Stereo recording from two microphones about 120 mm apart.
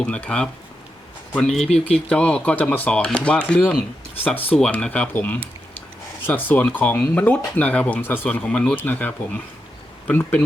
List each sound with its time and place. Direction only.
0.0 s speech: 10° left (ahead or behind)